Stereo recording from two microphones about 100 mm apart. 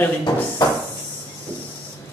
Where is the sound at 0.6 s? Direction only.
40° left (ahead or behind).